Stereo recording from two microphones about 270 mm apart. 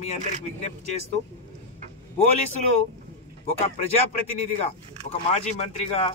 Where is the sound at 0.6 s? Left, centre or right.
Left.